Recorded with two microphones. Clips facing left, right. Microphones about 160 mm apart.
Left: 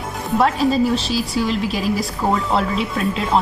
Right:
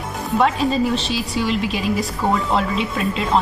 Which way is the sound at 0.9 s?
40° left (ahead or behind).